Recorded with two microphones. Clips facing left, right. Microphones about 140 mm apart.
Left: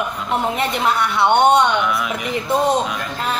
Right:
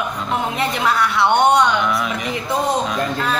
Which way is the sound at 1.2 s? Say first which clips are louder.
Left 1 dB; 25° left (ahead or behind).